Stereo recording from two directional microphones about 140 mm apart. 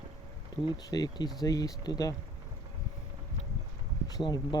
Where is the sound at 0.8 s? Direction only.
30° left (ahead or behind).